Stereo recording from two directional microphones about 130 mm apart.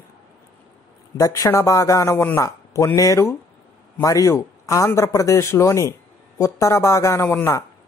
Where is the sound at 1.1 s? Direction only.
25° left (ahead or behind).